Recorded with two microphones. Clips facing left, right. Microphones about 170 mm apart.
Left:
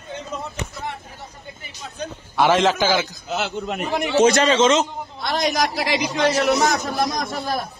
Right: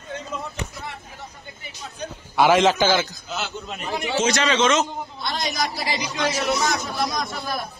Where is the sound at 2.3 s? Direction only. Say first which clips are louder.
Right 1 dB; 5° right (ahead or behind).